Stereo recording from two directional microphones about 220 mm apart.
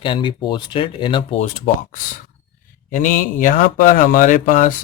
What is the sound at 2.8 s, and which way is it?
Speech, 40° left (ahead or behind).